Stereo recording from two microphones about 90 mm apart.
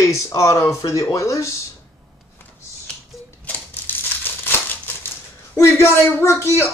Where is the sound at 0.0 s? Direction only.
35° left (ahead or behind).